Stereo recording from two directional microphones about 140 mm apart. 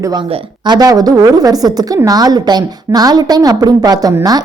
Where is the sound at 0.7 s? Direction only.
25° right (ahead or behind).